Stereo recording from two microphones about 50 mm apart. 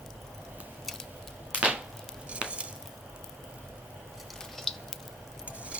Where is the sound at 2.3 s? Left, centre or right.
Right.